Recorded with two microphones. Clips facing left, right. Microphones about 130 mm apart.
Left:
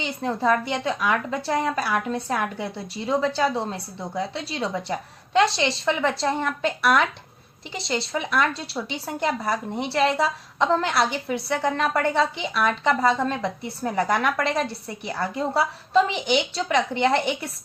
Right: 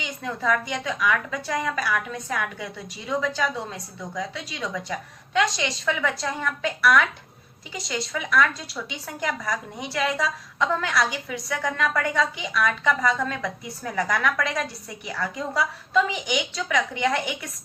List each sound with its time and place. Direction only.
0.0 s a woman's voice: 30° left (ahead or behind)